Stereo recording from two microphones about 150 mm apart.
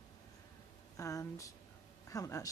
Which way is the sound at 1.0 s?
20° left (ahead or behind).